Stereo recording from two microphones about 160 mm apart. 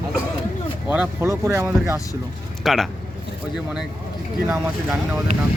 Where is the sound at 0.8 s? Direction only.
10° right (ahead or behind).